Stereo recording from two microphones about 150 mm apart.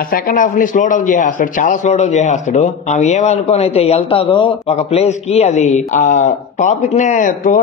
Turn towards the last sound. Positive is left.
turn(degrees=60)  # may be behind; listen again after turning